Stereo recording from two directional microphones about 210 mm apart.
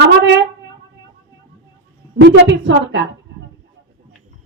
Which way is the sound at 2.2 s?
60° right (ahead or behind).